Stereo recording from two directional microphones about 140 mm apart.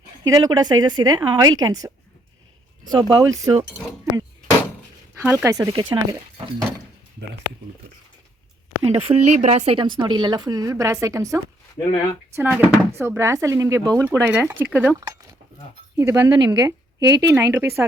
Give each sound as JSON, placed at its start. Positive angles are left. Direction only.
{"t": 0.3, "sound": "speech", "side_deg": -25}
{"t": 2.9, "sound": "speech", "side_deg": -30}
{"t": 5.2, "sound": "speech", "side_deg": -15}
{"t": 9.0, "sound": "speech", "side_deg": -50}
{"t": 15.0, "sound": "a sound", "side_deg": -25}
{"t": 16.0, "sound": "speech", "side_deg": -20}
{"t": 16.3, "sound": "speech", "side_deg": -30}